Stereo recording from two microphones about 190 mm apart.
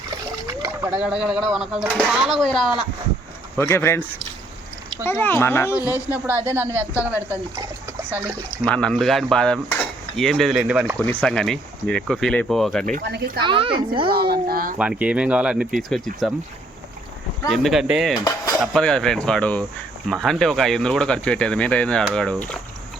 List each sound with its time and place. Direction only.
0.9 s speech: 5° right (ahead or behind)
3.6 s speech: 15° left (ahead or behind)
5.0 s speech: 10° left (ahead or behind)
5.9 s speech: 10° right (ahead or behind)
8.6 s speech: 5° left (ahead or behind)
11.0 s speech: 5° left (ahead or behind)
13.1 s a child's voice: 60° right (ahead or behind)
13.4 s speech: 25° right (ahead or behind)
14.1 s speech: 55° right (ahead or behind)
14.8 s speech: 5° right (ahead or behind)
17.5 s speech: centre (ahead or behind)